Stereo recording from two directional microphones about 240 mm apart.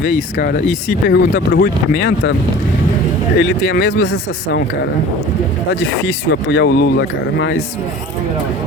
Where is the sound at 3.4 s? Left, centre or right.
Left.